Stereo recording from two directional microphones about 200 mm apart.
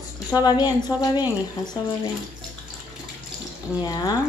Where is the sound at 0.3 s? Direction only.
20° left (ahead or behind).